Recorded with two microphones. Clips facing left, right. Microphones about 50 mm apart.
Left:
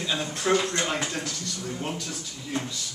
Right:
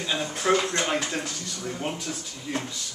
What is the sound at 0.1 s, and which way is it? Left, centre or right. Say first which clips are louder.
Speech: right 1 dB; centre.